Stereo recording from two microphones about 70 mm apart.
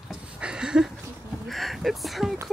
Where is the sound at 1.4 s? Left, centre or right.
Centre.